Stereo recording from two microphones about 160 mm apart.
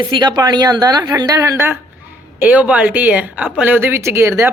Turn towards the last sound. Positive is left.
turn(degrees=-15)  # may be behind; listen again after turning